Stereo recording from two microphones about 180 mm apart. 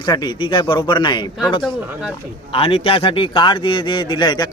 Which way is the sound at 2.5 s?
35° left (ahead or behind).